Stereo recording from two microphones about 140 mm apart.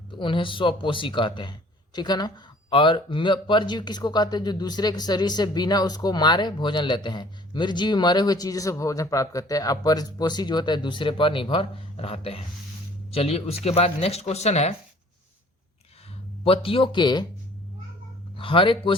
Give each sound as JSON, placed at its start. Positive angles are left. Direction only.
{"t": 0.1, "sound": "speech", "side_deg": 35}
{"t": 16.4, "sound": "speech", "side_deg": 40}
{"t": 18.3, "sound": "speech", "side_deg": 40}